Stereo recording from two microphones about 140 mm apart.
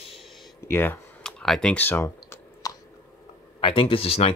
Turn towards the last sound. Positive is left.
turn(degrees=45)  # may be behind; listen again after turning